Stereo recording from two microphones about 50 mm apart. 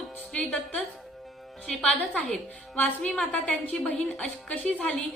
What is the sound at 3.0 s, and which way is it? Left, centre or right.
A woman's voice, centre.